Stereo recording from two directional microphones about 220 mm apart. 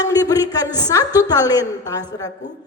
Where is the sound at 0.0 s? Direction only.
15° left (ahead or behind).